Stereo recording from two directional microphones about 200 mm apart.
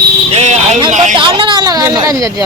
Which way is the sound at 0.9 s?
30° right (ahead or behind).